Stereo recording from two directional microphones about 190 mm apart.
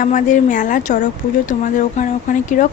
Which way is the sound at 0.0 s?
40° left (ahead or behind).